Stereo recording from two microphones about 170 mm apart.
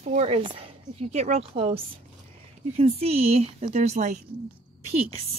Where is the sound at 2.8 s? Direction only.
35° right (ahead or behind).